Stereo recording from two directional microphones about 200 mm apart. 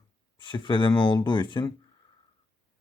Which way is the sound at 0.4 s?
25° left (ahead or behind).